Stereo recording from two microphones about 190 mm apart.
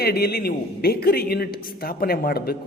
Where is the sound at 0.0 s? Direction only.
55° left (ahead or behind).